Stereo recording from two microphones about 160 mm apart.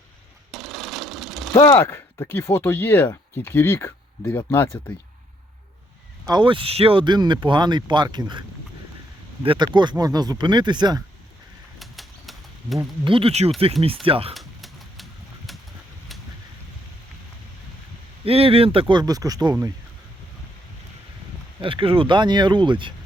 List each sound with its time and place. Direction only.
0.5 s a sound: centre (ahead or behind)
1.6 s speech: 20° left (ahead or behind)
6.2 s speech: 30° right (ahead or behind)
11.8 s bird flight: centre (ahead or behind)
13.1 s speech: 35° right (ahead or behind)
14.3 s a sound: centre (ahead or behind)
18.3 s speech: 35° right (ahead or behind)
21.6 s speech: 35° right (ahead or behind)